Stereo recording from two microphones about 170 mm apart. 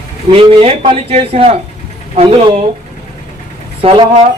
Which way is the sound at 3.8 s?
35° right (ahead or behind).